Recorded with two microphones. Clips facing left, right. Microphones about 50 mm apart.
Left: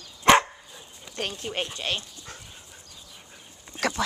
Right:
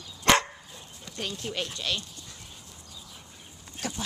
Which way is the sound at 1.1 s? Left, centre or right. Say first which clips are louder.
Left 4 dB; centre.